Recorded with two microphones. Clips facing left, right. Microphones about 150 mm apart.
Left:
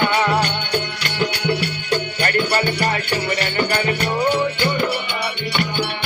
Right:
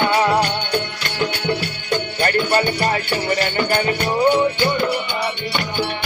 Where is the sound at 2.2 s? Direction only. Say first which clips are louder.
Right 4 dB; 30° right (ahead or behind).